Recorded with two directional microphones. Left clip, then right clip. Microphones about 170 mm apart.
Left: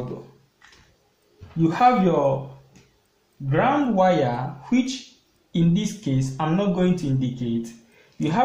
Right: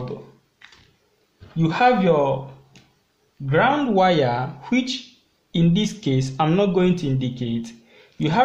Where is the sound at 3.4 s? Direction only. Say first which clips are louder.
Right 2 dB; 45° right (ahead or behind).